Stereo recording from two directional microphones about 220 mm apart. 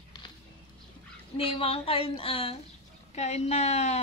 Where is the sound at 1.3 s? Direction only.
25° left (ahead or behind).